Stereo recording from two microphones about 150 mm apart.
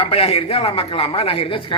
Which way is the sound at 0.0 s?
40° left (ahead or behind).